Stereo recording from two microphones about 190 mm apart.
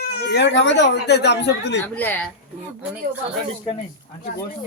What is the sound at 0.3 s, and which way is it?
Speech, 70° left (ahead or behind).